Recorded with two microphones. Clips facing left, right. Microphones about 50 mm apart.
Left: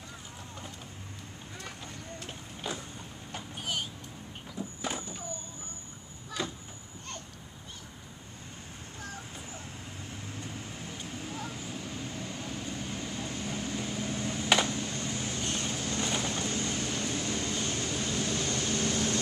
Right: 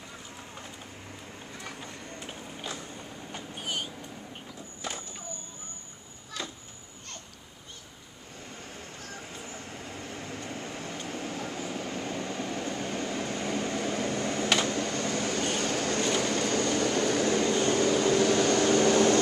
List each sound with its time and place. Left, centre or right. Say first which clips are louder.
3.3 s vehicle: even; centre
6.4 s vehicle: left 3 dB; centre
10.0 s vehicle: right 3 dB; right
16.2 s vehicle: right 6 dB; right